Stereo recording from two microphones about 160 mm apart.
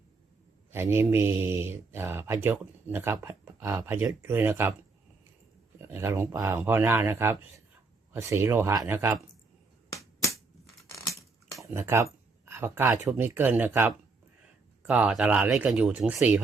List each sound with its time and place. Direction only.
0.7 s speech: 15° right (ahead or behind)
5.9 s speech: 15° right (ahead or behind)
9.9 s finger snapping: 20° left (ahead or behind)
11.6 s speech: 15° right (ahead or behind)